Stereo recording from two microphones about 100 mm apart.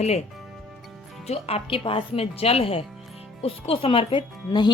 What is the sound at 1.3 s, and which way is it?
Speech, 90° left.